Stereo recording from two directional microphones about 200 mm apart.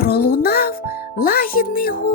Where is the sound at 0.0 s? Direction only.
50° left (ahead or behind).